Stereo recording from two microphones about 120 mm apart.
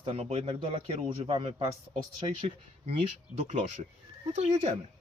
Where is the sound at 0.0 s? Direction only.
50° right (ahead or behind).